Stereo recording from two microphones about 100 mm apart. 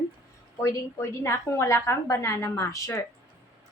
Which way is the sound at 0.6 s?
30° left (ahead or behind).